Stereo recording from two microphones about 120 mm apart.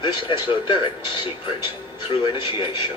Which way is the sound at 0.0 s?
35° left (ahead or behind).